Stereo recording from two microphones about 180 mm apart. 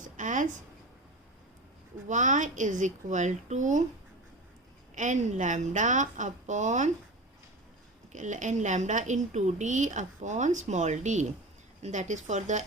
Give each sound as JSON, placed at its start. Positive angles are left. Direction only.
{"t": 0.0, "sound": "a sound", "side_deg": -45}
{"t": 2.0, "sound": "a woman's voice", "side_deg": -45}
{"t": 4.9, "sound": "a woman's voice", "side_deg": -45}
{"t": 8.1, "sound": "a woman's voice", "side_deg": -45}